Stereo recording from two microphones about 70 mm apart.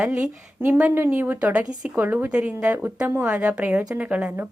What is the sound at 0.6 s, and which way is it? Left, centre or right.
Speech, right.